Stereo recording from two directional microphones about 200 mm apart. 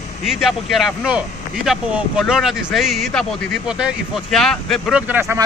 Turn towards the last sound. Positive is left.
turn(degrees=-10)  # may be behind; listen again after turning